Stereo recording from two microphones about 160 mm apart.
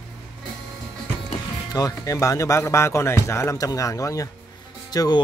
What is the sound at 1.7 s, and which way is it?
Speech, 20° left (ahead or behind).